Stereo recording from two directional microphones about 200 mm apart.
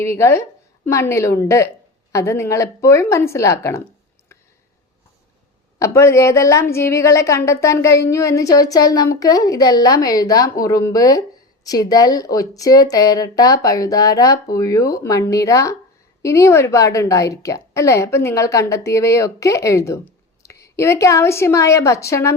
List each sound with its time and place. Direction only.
0.0 s a woman's voice: 15° left (ahead or behind)
5.8 s a woman's voice: 15° left (ahead or behind)